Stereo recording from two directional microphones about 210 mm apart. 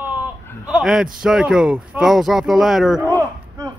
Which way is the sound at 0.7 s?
5° right (ahead or behind).